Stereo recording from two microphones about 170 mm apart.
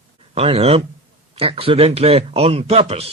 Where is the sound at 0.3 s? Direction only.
35° right (ahead or behind).